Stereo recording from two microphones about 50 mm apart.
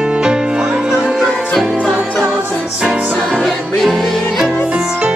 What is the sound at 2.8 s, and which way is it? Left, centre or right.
Music, right.